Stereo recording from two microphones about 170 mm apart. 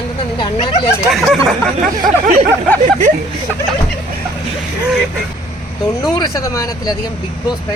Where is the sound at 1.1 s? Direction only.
Centre (ahead or behind).